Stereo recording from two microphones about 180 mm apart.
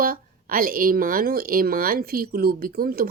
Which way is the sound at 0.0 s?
50° right (ahead or behind).